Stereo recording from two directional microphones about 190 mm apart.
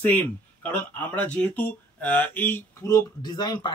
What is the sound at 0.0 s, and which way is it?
Speech, 10° left (ahead or behind).